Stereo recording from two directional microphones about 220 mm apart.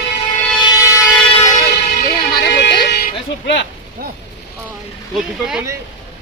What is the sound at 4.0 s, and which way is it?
Speech, 40° right (ahead or behind).